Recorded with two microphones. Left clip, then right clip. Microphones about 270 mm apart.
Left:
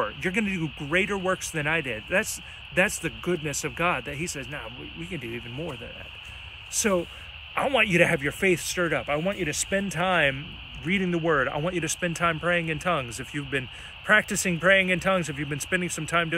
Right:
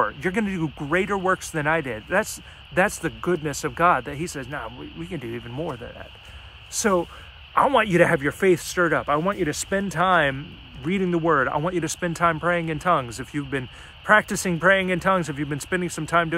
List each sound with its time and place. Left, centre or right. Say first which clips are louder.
0.0 s speech: right 3 dB; centre
6.8 s speech: right 3 dB; centre